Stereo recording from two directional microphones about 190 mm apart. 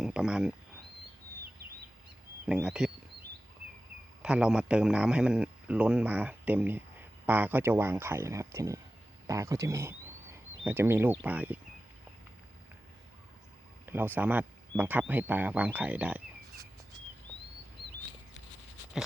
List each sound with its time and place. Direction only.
0.0 s speech: 5° right (ahead or behind)
2.5 s a man's voice: 5° right (ahead or behind)
4.2 s a man's voice: 5° right (ahead or behind)
13.8 s speech: 10° right (ahead or behind)